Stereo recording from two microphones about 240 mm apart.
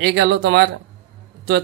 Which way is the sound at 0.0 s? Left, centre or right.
Right.